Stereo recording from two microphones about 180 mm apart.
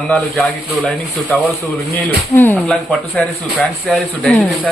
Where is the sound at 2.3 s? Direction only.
10° left (ahead or behind).